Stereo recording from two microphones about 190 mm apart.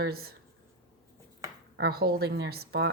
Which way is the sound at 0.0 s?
55° right (ahead or behind).